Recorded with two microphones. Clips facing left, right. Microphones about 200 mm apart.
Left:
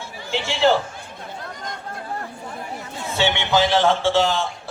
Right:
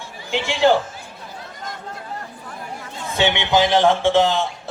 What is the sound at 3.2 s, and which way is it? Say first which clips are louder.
A man's voice: right 2 dB; 15° right (ahead or behind).